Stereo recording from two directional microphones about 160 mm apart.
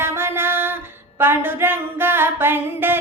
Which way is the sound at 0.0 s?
15° right (ahead or behind).